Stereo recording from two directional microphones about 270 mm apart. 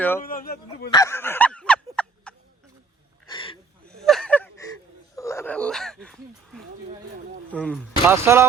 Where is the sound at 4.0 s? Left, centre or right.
Centre.